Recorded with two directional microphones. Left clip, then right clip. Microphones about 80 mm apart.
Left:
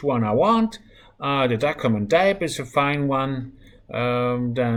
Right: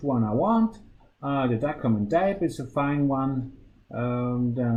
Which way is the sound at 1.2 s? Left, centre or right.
Left.